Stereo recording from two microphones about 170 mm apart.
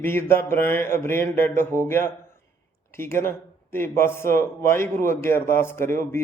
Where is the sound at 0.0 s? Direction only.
15° left (ahead or behind).